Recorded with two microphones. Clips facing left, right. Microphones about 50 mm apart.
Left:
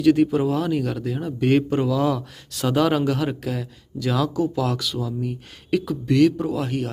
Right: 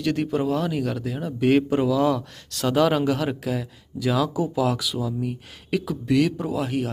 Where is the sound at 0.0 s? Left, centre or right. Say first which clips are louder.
Left 6 dB; centre.